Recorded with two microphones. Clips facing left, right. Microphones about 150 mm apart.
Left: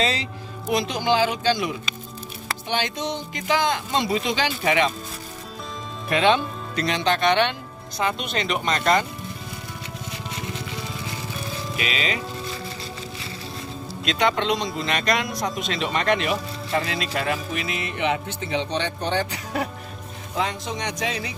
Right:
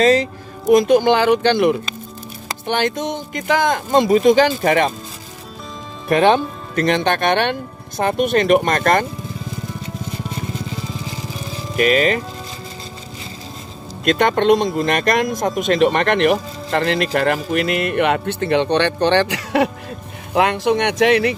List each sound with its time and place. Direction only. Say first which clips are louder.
0.0 s speech: right 11 dB; 45° right (ahead or behind)
6.0 s speech: right 6 dB; 45° right (ahead or behind)
11.7 s speech: right 13 dB; 50° right (ahead or behind)
14.0 s speech: right 8 dB; 55° right (ahead or behind)